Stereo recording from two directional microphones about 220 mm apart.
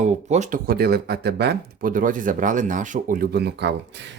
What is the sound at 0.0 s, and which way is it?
Speech, 30° right (ahead or behind).